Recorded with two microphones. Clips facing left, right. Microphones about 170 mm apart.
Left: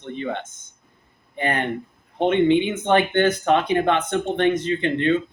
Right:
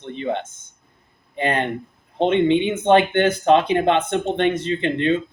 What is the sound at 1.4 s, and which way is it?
Speech, 20° right (ahead or behind).